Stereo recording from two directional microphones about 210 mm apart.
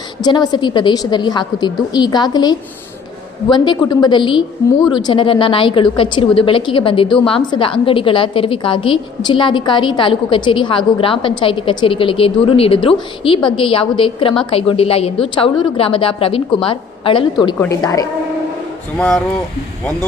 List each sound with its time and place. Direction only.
0.2 s a woman's voice: 20° left (ahead or behind)
18.9 s speech: centre (ahead or behind)